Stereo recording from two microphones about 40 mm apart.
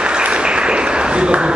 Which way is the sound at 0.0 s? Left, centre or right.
Right.